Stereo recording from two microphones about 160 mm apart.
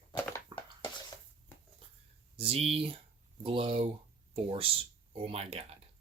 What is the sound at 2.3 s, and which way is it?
Speech, 35° right (ahead or behind).